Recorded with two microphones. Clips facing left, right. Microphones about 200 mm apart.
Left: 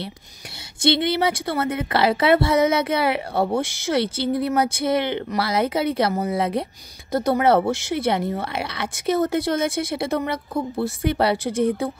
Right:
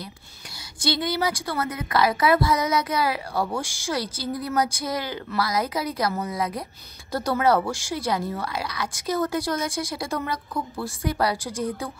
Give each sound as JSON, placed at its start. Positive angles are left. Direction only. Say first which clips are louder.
{"t": 0.8, "sound": "a woman's voice", "louder": "left 5 dB", "side_deg": 25}